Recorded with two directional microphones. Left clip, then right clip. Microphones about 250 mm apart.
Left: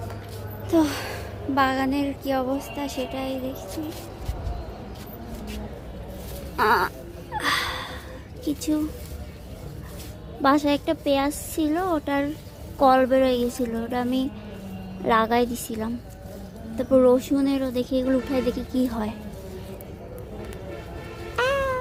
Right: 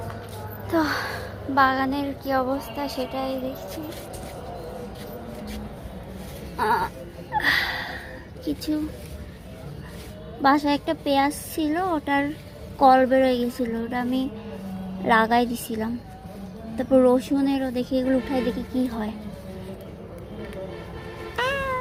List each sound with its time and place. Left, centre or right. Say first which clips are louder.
0.7 s a woman's voice: left 1 dB; centre
6.6 s sheep: left 2 dB; left
7.3 s a sound: right 3 dB; centre
8.4 s a woman's voice: left 1 dB; centre
10.4 s a woman's voice: even; centre
21.3 s cat: left 2 dB; centre